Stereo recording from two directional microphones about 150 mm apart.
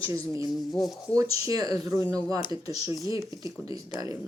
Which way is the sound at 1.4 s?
25° right (ahead or behind).